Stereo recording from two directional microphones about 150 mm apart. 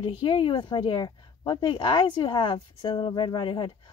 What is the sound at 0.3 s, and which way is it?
Speech, 35° left (ahead or behind).